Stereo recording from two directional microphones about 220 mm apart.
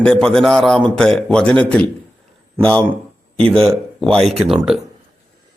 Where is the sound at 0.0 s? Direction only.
5° left (ahead or behind).